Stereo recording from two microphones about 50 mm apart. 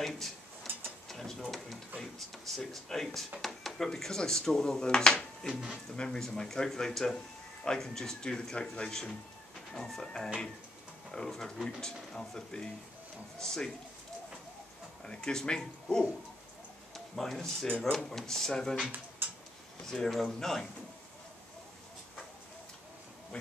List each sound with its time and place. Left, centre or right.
0.8 s mechanisms: centre
2.0 s speech: centre
15.0 s speech: centre